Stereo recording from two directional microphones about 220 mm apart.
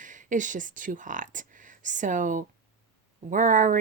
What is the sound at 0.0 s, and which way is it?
Speech, 35° right (ahead or behind).